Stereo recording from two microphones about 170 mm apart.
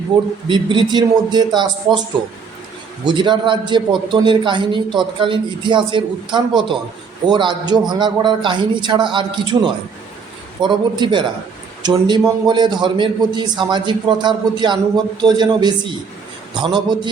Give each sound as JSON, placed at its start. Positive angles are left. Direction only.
{"t": 0.1, "sound": "a man's voice", "side_deg": -30}
{"t": 10.6, "sound": "a man's voice", "side_deg": -25}